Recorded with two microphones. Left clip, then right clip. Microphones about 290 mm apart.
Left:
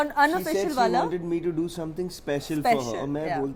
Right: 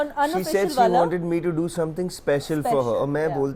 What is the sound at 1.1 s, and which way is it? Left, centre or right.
Speech, right.